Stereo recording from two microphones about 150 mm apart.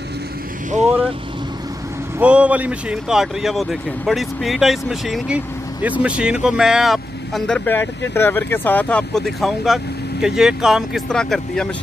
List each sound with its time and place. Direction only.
2.1 s speech: 10° right (ahead or behind)